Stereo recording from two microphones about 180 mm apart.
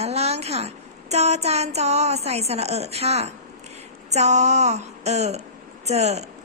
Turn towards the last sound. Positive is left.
turn(degrees=-35)  # may be behind; listen again after turning